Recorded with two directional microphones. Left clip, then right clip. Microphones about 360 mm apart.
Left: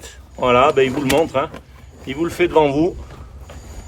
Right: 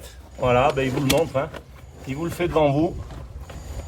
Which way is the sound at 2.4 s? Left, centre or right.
Left.